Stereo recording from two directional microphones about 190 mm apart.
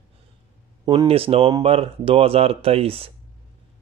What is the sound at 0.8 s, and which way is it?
Speech, 20° right (ahead or behind).